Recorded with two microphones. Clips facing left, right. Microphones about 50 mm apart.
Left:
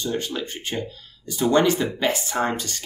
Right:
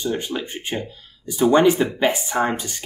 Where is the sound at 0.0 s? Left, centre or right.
Centre.